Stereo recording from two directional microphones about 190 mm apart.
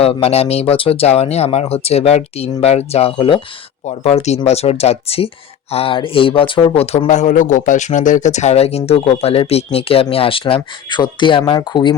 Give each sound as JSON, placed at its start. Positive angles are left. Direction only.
{"t": 0.0, "sound": "speech", "side_deg": 30}